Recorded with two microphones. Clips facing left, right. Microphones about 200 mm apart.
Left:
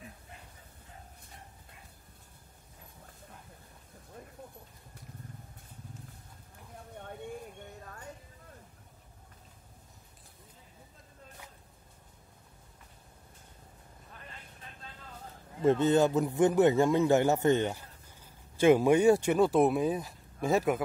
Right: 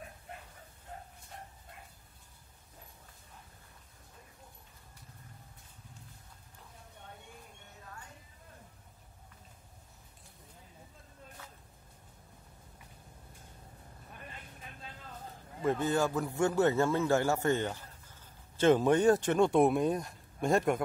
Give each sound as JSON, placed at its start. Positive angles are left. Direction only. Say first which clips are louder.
{"t": 15.6, "sound": "speech", "louder": "left 6 dB", "side_deg": 25}